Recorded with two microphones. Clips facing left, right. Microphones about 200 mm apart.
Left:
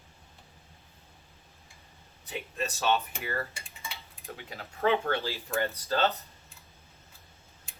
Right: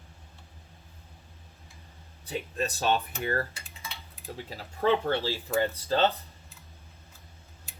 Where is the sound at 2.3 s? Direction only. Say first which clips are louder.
Right 3 dB; 35° right (ahead or behind).